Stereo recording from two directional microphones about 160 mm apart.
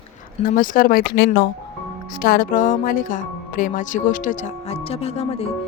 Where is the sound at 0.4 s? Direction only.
60° left (ahead or behind); by 1.3 s 80° left.